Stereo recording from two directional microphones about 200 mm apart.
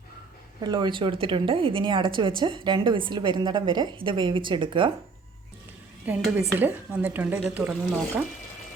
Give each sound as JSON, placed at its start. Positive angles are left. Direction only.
{"t": 0.6, "sound": "speech", "side_deg": -20}
{"t": 6.1, "sound": "speech", "side_deg": -10}